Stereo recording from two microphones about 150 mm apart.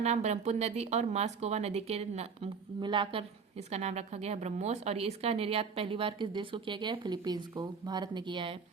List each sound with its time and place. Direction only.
0.0 s speech: 50° right (ahead or behind)
2.8 s a woman's voice: 30° right (ahead or behind)
3.7 s a woman's voice: 45° right (ahead or behind)